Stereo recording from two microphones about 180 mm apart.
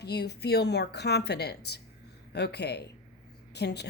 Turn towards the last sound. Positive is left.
turn(degrees=65)  # may be behind; listen again after turning